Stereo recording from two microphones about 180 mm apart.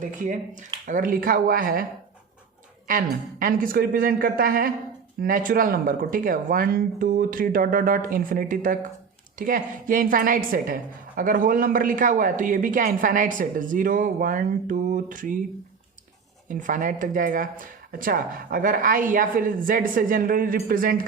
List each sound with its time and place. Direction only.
0.0 s a woman's voice: 45° right (ahead or behind)
16.5 s a woman's voice: 45° right (ahead or behind)